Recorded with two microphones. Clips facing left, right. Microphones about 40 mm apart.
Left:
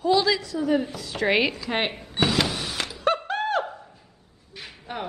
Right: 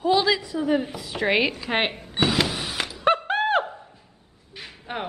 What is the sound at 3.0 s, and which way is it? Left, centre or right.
Thunk, right.